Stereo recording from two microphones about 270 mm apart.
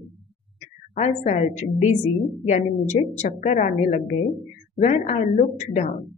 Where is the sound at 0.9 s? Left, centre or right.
Left.